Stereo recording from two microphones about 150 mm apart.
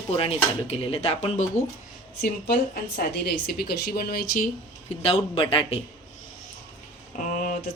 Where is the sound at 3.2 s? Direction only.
90° left.